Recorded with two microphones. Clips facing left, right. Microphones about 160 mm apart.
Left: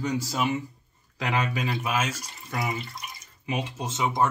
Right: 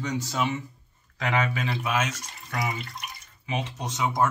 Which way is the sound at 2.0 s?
10° left (ahead or behind).